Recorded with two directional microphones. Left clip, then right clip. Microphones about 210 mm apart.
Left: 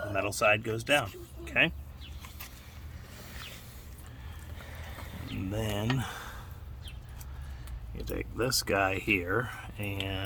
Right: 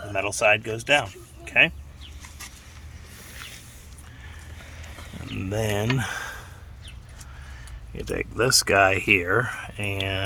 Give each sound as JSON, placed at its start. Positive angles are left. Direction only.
{"t": 0.1, "sound": "speech", "side_deg": 0}
{"t": 5.4, "sound": "speech", "side_deg": -25}
{"t": 8.1, "sound": "speech", "side_deg": -35}